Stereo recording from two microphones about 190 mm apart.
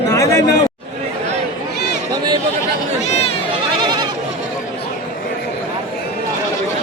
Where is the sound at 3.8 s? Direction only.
25° right (ahead or behind).